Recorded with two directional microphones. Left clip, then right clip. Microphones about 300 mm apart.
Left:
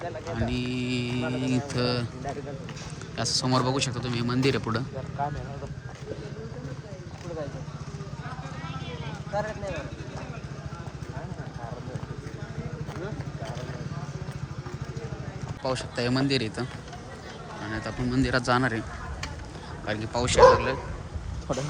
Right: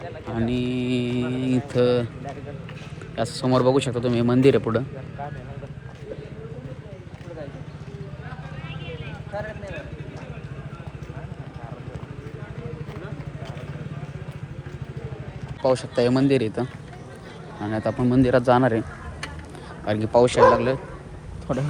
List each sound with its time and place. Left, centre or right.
0.3 s mantra: centre
3.2 s speech: centre
9.4 s vehicle: left
15.6 s speech: centre
17.7 s speech: centre
19.8 s speech: centre